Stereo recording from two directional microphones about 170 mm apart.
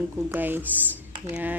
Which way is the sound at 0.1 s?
10° right (ahead or behind).